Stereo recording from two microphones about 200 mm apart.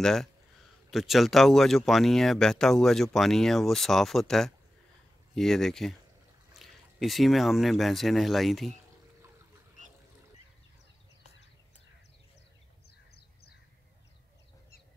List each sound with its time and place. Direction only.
0.0 s speech: centre (ahead or behind)
13.1 s crow: 55° left (ahead or behind)